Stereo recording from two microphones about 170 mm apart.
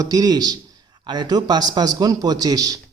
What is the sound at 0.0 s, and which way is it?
Speech, 20° right (ahead or behind).